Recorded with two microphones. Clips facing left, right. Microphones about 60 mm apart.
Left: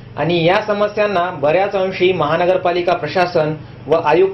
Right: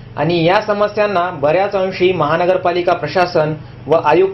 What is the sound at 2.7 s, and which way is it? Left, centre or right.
Speech, right.